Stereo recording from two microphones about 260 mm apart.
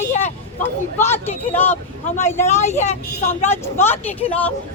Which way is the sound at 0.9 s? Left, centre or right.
Centre.